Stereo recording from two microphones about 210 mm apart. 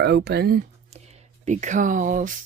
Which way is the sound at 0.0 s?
50° right (ahead or behind).